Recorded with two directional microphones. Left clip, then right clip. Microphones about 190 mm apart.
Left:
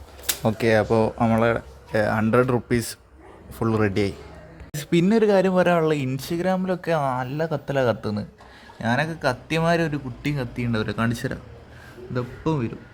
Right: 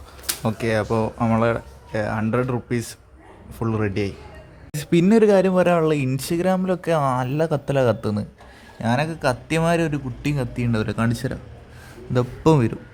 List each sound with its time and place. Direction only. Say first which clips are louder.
0.3 s speech: left 3 dB; 10° left (ahead or behind)
4.7 s speech: right 3 dB; 5° right (ahead or behind)
12.1 s a man's voice: right 8 dB; 30° right (ahead or behind)